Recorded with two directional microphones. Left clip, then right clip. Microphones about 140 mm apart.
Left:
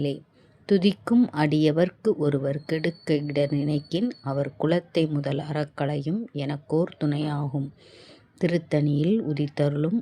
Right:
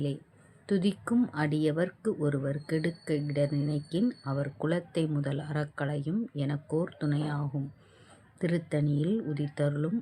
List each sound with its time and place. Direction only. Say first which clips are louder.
0.7 s speech: left 8 dB; 60° left (ahead or behind)